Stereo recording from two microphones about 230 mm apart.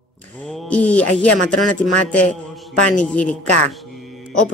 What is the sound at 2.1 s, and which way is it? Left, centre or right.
A man's voice, centre.